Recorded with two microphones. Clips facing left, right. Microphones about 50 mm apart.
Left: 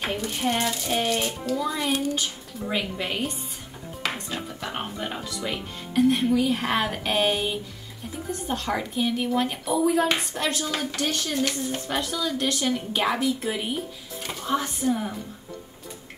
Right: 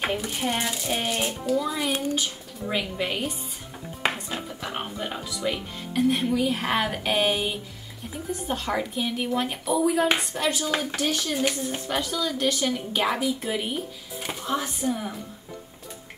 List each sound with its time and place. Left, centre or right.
0.1 s speech: centre
4.0 s a sound: right
4.4 s speech: centre